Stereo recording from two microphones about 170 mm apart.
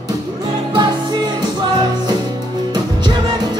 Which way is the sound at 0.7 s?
25° right (ahead or behind).